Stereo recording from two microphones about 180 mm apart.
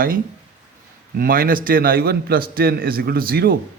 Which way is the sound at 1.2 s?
50° right (ahead or behind).